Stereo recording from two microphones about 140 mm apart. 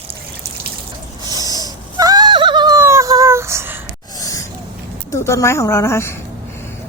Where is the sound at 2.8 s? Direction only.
20° right (ahead or behind).